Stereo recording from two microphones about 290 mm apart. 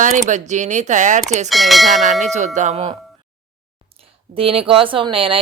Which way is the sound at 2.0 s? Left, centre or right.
Right.